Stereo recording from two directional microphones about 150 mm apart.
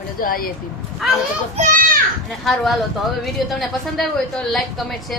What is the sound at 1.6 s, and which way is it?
Speech, 45° right (ahead or behind).